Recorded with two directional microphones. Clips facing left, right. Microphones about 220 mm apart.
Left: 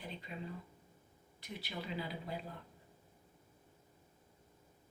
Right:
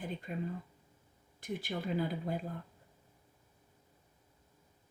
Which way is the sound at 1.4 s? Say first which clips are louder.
Right 7 dB; 50° right (ahead or behind).